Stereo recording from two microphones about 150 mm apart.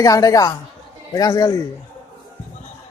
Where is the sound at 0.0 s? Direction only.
25° left (ahead or behind).